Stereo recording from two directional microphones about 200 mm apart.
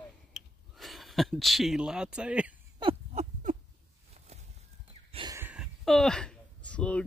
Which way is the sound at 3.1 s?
35° right (ahead or behind).